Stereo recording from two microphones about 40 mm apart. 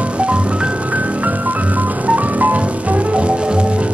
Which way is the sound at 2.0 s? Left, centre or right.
Right.